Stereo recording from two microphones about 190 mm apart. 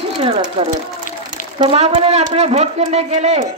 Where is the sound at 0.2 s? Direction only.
30° right (ahead or behind).